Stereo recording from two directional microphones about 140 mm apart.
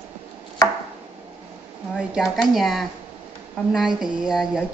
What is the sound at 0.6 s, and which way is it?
Chopping, 20° left (ahead or behind).